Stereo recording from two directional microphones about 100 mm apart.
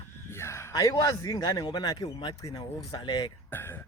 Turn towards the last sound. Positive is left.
turn(degrees=20)  # may be behind; listen again after turning